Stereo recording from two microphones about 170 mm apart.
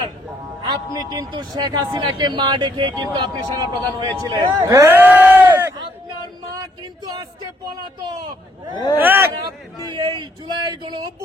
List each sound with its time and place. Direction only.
0.6 s speech: 25° right (ahead or behind)
6.6 s a sound: 20° right (ahead or behind)
9.0 s speech: 10° right (ahead or behind)
9.9 s speech: 25° right (ahead or behind)